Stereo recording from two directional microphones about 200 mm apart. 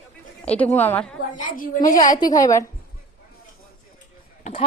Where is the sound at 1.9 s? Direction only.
20° left (ahead or behind).